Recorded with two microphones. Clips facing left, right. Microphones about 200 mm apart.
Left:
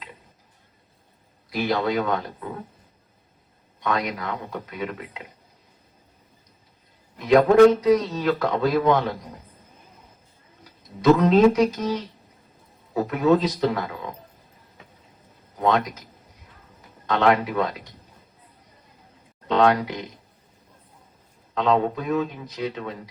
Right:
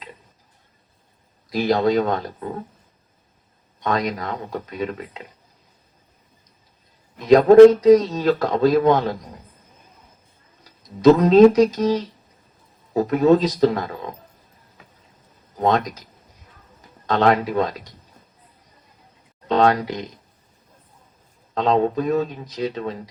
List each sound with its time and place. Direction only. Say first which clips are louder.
1.5 s speech: right 5 dB; 40° right (ahead or behind)
3.8 s speech: right 3 dB; 40° right (ahead or behind)
7.3 s speech: right 5 dB; 35° right (ahead or behind)
11.2 s speech: right 5 dB; 35° right (ahead or behind)
17.1 s speech: right 2 dB; 40° right (ahead or behind)
19.5 s speech: right 1 dB; 40° right (ahead or behind)
21.5 s speech: right 3 dB; 40° right (ahead or behind)